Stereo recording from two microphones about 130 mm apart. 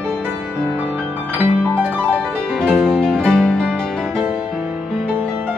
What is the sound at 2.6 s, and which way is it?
Music, 5° left (ahead or behind).